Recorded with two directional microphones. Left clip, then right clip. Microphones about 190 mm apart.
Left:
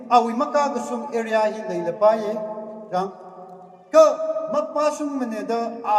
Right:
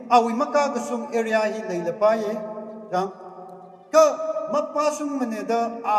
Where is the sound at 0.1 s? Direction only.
25° right (ahead or behind).